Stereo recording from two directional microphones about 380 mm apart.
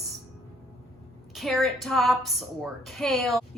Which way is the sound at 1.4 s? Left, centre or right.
Centre.